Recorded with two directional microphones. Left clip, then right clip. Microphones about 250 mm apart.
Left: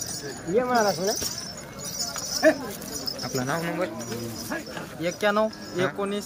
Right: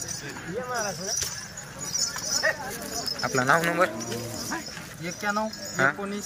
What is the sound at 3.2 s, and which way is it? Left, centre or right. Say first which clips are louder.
Speech: right 7 dB; centre.